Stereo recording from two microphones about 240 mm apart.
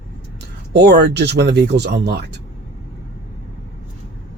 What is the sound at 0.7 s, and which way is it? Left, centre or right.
Speech, right.